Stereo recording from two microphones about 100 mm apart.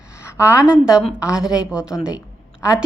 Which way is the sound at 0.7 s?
5° right (ahead or behind).